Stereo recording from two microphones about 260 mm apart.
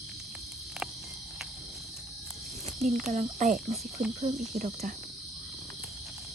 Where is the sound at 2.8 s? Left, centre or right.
Centre.